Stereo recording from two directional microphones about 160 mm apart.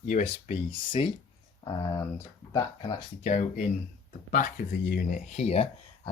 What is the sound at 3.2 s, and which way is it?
Speech, 45° left (ahead or behind).